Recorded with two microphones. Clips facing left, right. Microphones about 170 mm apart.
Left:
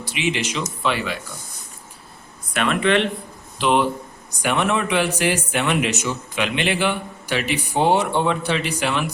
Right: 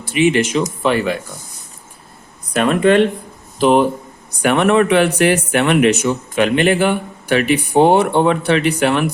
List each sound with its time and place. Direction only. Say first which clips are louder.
0.0 s speech: right 10 dB; 50° right (ahead or behind)
2.5 s speech: right 6 dB; 40° right (ahead or behind)
4.4 s speech: right 8 dB; 60° right (ahead or behind)